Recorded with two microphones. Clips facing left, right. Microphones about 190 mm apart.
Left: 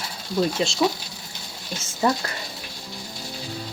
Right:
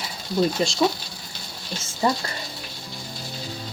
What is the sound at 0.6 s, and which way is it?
Speech, 45° right (ahead or behind).